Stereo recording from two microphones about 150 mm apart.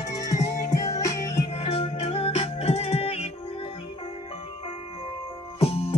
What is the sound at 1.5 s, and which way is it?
Music, 40° left (ahead or behind).